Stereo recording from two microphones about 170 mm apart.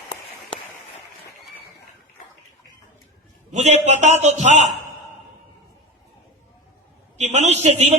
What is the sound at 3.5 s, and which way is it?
A man's voice, 45° right (ahead or behind).